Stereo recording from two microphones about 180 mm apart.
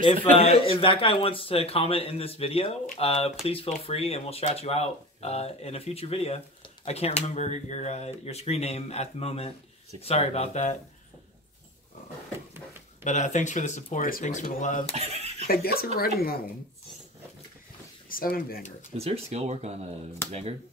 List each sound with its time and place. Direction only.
0.0 s speech: 30° left (ahead or behind)
13.0 s speech: 40° left (ahead or behind)
15.0 s speech: 35° right (ahead or behind)
15.4 s speech: 55° left (ahead or behind)
18.1 s speech: 55° left (ahead or behind)
18.9 s speech: 35° right (ahead or behind)